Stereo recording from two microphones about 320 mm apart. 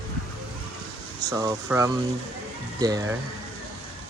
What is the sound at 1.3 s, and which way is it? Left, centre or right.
Speech, centre.